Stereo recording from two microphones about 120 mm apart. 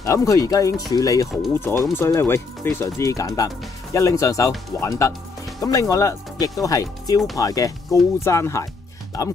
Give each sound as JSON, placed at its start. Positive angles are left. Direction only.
{"t": 0.0, "sound": "speech", "side_deg": 25}